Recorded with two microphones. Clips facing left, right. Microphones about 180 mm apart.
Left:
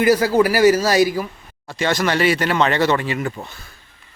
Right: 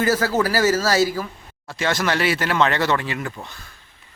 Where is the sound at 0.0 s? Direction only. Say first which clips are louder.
Left 5 dB; 15° left (ahead or behind).